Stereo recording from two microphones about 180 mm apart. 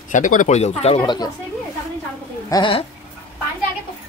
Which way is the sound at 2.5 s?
25° left (ahead or behind).